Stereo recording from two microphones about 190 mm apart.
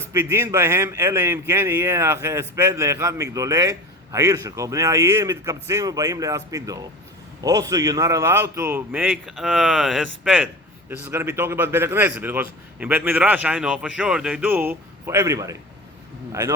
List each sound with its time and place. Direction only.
0.1 s a man's voice: 15° right (ahead or behind)